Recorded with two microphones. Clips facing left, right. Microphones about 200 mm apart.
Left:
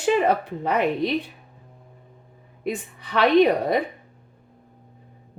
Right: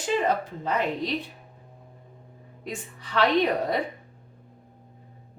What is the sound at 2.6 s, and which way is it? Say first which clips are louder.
Speech: left 8 dB; 65° left (ahead or behind).